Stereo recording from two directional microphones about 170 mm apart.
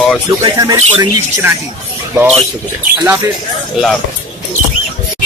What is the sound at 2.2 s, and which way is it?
Speech, 15° right (ahead or behind).